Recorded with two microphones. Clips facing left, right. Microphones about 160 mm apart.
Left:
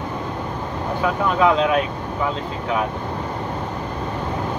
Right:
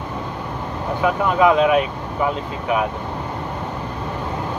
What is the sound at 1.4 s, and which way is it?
Speech, 15° right (ahead or behind).